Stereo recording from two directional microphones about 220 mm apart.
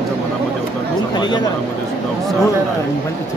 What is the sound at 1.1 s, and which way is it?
Speech, 20° left (ahead or behind).